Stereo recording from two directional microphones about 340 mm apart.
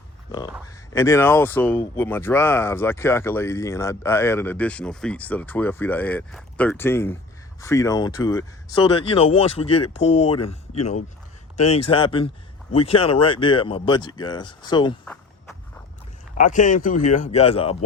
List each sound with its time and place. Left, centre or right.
0.3 s a sound: centre
0.9 s speech: centre
15.0 s walk: centre
16.4 s speech: left